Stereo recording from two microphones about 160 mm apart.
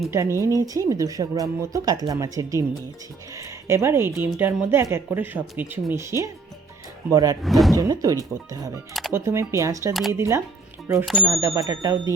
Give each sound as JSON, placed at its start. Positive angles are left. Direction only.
{"t": 0.1, "sound": "speech", "side_deg": -15}
{"t": 7.4, "sound": "speech", "side_deg": 0}
{"t": 7.8, "sound": "speech", "side_deg": -20}
{"t": 8.9, "sound": "speech", "side_deg": 0}
{"t": 9.1, "sound": "speech", "side_deg": -15}
{"t": 11.0, "sound": "speech", "side_deg": 0}
{"t": 11.3, "sound": "speech", "side_deg": -20}